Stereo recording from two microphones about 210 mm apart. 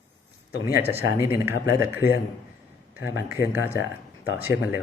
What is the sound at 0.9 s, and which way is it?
Speech, 10° right (ahead or behind).